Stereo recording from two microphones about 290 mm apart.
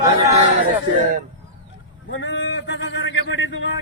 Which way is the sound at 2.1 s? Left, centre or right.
Left.